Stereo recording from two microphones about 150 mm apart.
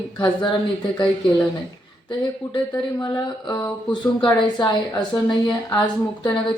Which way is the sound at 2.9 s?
25° left (ahead or behind).